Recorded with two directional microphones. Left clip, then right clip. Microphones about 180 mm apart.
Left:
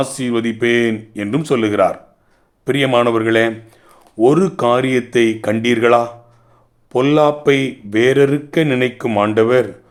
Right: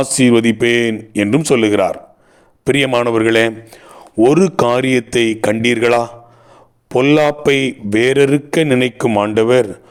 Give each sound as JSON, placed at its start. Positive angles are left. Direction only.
{"t": 0.0, "sound": "a man's voice", "side_deg": -40}